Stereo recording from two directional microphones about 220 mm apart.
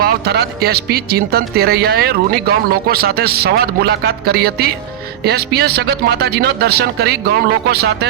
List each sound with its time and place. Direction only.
0.0 s speech: 45° right (ahead or behind)